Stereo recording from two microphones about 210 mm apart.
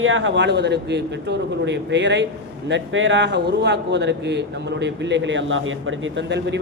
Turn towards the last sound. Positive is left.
turn(degrees=-55)  # may be behind; listen again after turning